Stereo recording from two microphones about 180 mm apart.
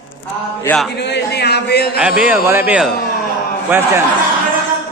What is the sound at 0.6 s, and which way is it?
Chant, 5° left (ahead or behind).